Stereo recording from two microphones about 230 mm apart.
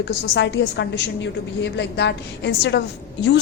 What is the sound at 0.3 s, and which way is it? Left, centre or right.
A woman's voice, left.